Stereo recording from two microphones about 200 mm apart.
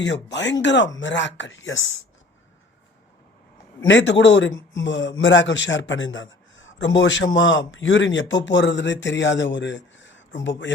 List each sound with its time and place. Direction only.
0.0 s speech: 60° left (ahead or behind)
3.8 s a man's voice: 65° left (ahead or behind)